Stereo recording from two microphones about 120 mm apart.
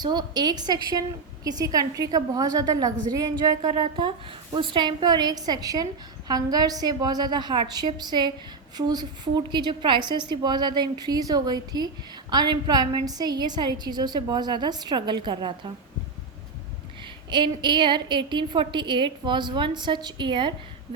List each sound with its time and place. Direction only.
0.0 s a woman's voice: 35° right (ahead or behind)
17.3 s a woman's voice: 40° right (ahead or behind)